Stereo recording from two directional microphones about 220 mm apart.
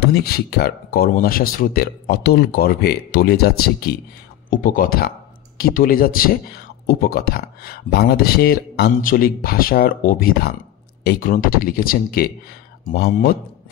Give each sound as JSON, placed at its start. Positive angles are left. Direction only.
{"t": 0.0, "sound": "speech", "side_deg": 45}